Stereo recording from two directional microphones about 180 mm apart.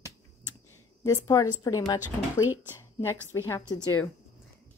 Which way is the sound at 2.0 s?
10° right (ahead or behind).